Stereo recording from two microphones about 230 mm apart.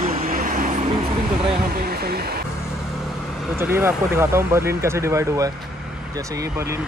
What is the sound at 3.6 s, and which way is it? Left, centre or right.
Speech, centre.